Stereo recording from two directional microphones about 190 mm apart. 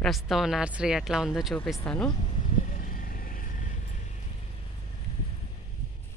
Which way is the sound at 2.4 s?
45° left (ahead or behind).